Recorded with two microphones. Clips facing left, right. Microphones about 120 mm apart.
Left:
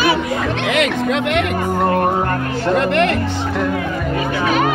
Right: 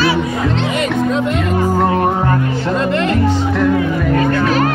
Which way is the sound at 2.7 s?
65° left (ahead or behind).